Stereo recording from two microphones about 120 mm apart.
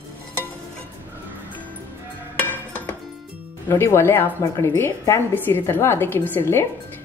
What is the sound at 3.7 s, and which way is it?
A woman's voice, 20° left (ahead or behind).